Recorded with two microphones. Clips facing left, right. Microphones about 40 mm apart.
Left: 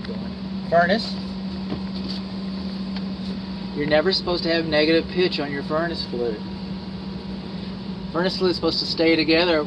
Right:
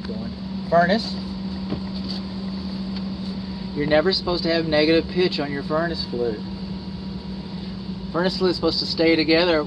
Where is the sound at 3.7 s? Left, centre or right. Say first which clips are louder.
Right 1 dB; centre.